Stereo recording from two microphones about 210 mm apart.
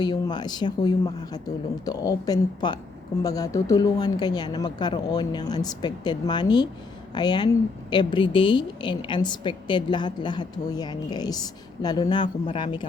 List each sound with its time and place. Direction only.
0.0 s a woman's voice: 20° left (ahead or behind)